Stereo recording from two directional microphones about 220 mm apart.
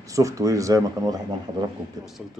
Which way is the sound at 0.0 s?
15° right (ahead or behind).